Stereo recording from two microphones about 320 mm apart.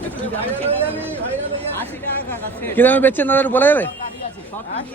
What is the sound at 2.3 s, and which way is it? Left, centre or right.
A man's voice, centre.